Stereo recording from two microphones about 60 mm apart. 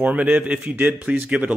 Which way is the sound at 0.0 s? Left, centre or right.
Right.